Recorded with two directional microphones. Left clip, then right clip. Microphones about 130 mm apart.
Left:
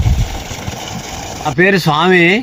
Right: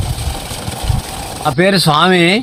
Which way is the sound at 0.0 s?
20° left (ahead or behind).